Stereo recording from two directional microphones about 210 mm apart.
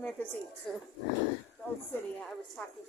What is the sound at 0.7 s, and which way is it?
Speech, centre (ahead or behind).